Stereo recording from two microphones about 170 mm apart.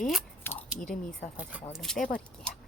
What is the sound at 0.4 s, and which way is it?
Scissors, 10° left (ahead or behind).